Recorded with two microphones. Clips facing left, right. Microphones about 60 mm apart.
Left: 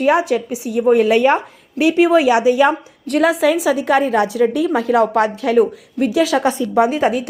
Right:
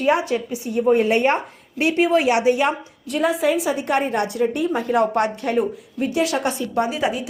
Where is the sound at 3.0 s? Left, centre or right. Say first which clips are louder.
Left 5 dB; left.